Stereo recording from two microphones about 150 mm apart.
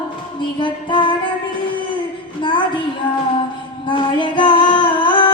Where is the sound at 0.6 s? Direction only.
30° left (ahead or behind).